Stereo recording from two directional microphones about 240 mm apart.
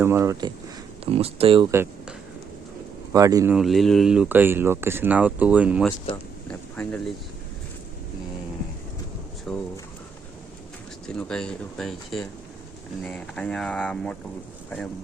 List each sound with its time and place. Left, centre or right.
0.0 s speech: centre
1.7 s a sound: centre
3.1 s speech: centre
3.5 s speech: centre
6.5 s a sound: centre
9.5 s speech: centre
11.1 s speech: centre